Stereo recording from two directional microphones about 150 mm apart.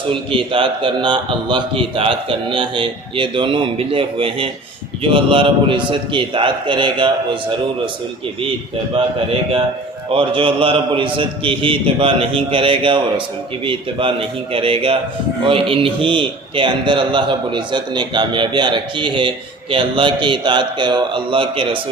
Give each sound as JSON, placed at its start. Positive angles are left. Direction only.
{"t": 0.1, "sound": "a man's voice", "side_deg": -35}
{"t": 10.1, "sound": "a man's voice", "side_deg": -35}